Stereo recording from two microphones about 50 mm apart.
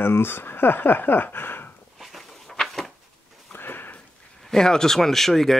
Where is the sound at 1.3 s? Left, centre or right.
Left.